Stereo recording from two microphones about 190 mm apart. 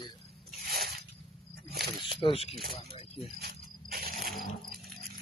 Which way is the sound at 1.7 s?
55° right (ahead or behind).